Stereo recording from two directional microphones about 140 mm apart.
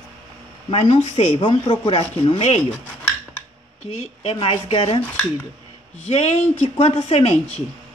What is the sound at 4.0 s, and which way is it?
Speech, 45° left (ahead or behind).